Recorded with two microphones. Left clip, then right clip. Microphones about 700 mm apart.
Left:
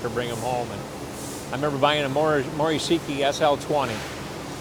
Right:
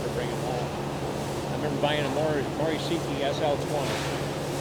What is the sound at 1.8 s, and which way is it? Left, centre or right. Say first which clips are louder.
Speech: left 5 dB; left.